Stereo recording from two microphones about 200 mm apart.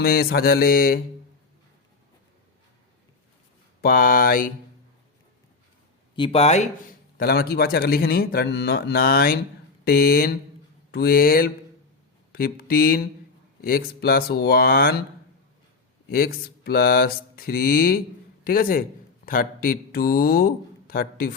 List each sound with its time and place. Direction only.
0.0 s speech: 50° left (ahead or behind)
3.8 s speech: 45° left (ahead or behind)
6.1 s speech: 25° left (ahead or behind)
7.2 s speech: 50° left (ahead or behind)
16.0 s speech: 50° left (ahead or behind)